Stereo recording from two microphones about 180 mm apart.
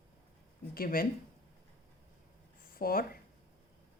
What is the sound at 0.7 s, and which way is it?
Speech, 55° left (ahead or behind).